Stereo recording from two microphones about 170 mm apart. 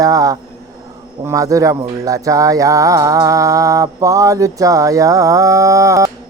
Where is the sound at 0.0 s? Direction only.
20° right (ahead or behind).